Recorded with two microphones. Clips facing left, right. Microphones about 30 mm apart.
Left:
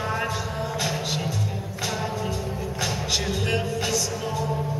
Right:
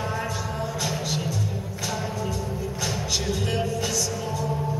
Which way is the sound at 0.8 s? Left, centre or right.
Centre.